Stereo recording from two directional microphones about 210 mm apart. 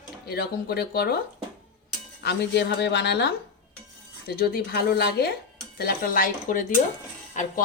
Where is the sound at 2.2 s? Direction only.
50° left (ahead or behind).